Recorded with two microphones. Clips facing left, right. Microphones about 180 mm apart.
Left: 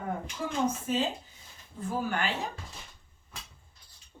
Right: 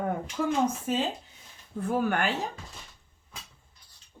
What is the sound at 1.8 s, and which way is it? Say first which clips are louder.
Speech: right 5 dB; 60° right (ahead or behind).